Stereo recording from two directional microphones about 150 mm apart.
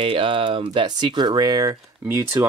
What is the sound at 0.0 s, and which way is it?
Speech, 35° right (ahead or behind).